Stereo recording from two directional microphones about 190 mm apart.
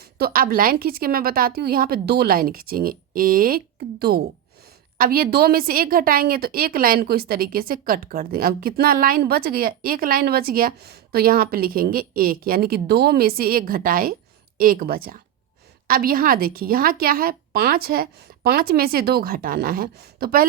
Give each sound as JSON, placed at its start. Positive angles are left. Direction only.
{"t": 0.0, "sound": "a woman's voice", "side_deg": -55}